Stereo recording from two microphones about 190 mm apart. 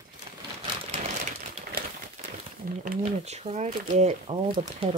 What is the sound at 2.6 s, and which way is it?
Speech, 45° right (ahead or behind).